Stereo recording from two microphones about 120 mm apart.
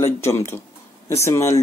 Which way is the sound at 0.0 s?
25° left (ahead or behind).